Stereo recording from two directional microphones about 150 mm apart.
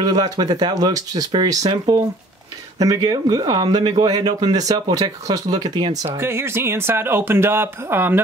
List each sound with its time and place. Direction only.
0.0 s speech: 25° right (ahead or behind)
6.0 s speech: 15° right (ahead or behind)